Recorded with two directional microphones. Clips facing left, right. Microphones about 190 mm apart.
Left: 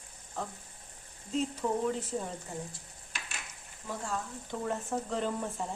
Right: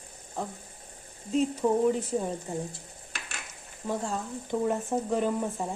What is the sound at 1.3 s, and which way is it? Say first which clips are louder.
Speech: right 6 dB; 15° right (ahead or behind).